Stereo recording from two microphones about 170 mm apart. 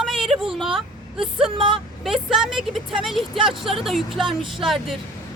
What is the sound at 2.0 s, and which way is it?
A woman's voice, centre (ahead or behind).